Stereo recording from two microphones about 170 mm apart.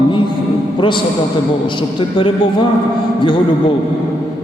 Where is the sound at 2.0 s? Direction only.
30° left (ahead or behind).